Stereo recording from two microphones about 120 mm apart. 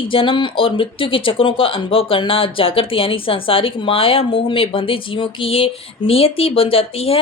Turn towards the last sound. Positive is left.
turn(degrees=55)  # may be behind; listen again after turning